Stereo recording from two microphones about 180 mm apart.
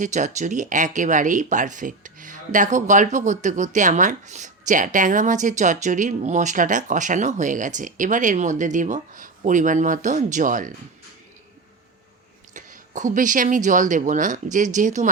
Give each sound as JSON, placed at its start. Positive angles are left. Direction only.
{"t": 0.0, "sound": "speech", "side_deg": -40}
{"t": 12.5, "sound": "speech", "side_deg": -45}